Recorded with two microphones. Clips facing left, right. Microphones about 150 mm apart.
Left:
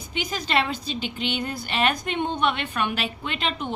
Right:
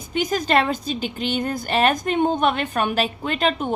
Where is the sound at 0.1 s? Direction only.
45° right (ahead or behind).